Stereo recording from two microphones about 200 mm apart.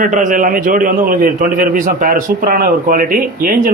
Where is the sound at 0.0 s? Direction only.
40° right (ahead or behind).